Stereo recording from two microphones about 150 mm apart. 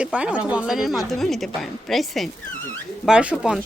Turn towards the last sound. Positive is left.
turn(degrees=-5)  # may be behind; listen again after turning